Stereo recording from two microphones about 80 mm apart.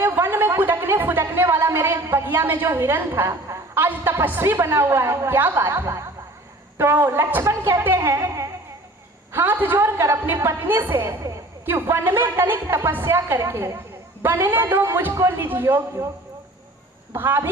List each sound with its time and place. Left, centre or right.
0.0 s a sound: right
2.6 s a woman's voice: right
7.4 s a woman's voice: right
9.7 s a woman's voice: right
17.1 s a woman's voice: right